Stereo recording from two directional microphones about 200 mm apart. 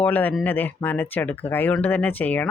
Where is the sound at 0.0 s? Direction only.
10° left (ahead or behind).